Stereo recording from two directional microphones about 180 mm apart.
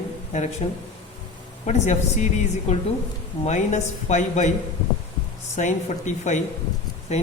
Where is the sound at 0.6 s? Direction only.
35° left (ahead or behind).